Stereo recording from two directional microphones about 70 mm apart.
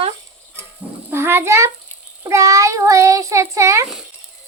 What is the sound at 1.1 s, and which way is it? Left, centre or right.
Speech, right.